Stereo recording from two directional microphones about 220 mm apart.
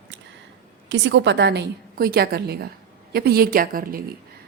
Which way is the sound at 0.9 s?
55° right (ahead or behind).